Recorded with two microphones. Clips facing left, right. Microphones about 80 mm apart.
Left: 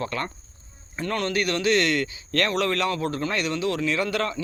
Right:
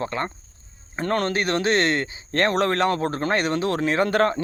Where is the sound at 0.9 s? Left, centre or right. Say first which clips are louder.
Right 3 dB; right.